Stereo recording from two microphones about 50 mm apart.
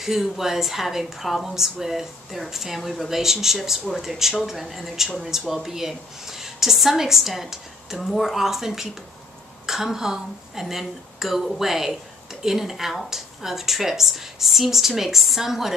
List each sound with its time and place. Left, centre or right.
0.0 s a woman's voice: centre